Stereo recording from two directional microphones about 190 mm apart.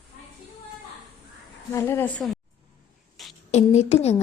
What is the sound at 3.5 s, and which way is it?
Speech, 35° left (ahead or behind).